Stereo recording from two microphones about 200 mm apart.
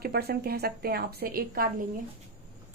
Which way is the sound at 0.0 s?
50° right (ahead or behind).